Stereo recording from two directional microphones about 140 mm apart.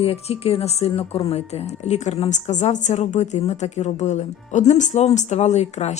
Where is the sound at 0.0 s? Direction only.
45° left (ahead or behind).